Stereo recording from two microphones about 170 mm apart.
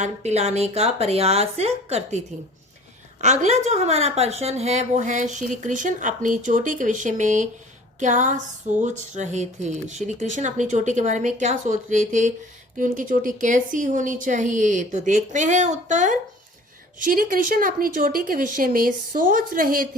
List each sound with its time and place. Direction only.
0.0 s speech: 40° right (ahead or behind); by 19.9 s 55° right (ahead or behind)